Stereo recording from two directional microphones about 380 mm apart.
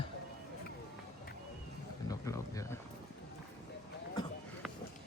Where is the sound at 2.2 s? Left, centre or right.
Centre.